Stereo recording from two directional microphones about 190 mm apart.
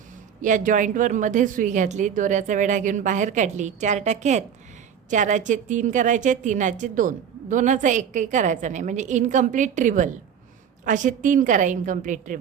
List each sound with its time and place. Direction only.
0.4 s a woman's voice: 45° right (ahead or behind)